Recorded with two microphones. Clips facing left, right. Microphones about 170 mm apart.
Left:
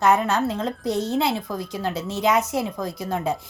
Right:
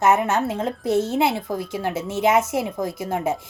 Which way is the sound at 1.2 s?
20° right (ahead or behind).